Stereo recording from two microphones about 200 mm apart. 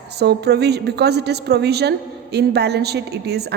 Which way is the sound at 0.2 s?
55° right (ahead or behind).